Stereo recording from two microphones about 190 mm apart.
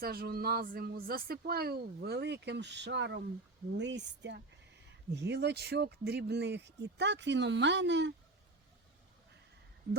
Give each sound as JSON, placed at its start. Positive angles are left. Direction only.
{"t": 0.0, "sound": "speech", "side_deg": -50}